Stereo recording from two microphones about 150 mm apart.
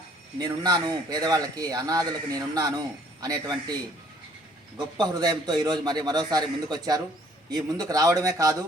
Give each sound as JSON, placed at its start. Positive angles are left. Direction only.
{"t": 0.3, "sound": "a man's voice", "side_deg": -25}
{"t": 4.9, "sound": "a man's voice", "side_deg": -25}